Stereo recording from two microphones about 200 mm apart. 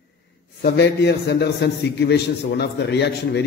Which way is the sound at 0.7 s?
55° left (ahead or behind).